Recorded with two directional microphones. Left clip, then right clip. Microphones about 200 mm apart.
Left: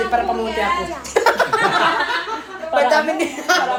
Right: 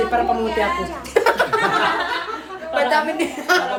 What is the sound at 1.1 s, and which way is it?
Music, 10° right (ahead or behind).